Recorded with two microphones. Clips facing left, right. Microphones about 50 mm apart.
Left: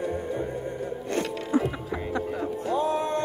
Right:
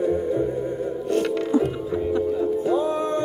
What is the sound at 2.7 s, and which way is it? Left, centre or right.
Music, centre.